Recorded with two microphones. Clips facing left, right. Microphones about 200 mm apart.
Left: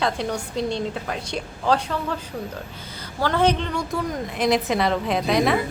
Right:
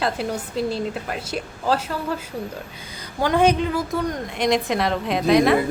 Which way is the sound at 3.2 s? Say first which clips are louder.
Right 3 dB; 15° right (ahead or behind).